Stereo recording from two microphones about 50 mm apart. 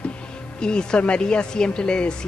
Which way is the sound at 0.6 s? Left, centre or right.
Centre.